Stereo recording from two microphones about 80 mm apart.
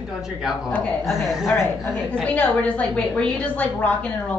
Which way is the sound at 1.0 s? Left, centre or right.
Centre.